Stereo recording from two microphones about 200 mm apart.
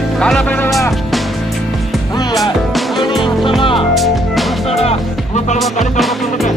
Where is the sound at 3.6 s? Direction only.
25° left (ahead or behind).